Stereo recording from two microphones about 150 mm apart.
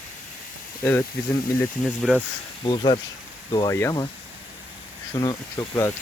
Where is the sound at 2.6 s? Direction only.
35° left (ahead or behind).